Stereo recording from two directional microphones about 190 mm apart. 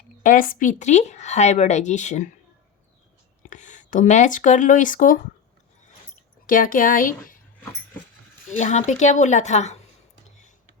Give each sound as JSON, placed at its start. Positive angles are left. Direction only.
{"t": 0.2, "sound": "a woman's voice", "side_deg": 45}
{"t": 3.5, "sound": "speech", "side_deg": 40}
{"t": 6.5, "sound": "a woman's voice", "side_deg": 45}
{"t": 8.4, "sound": "a woman's voice", "side_deg": 40}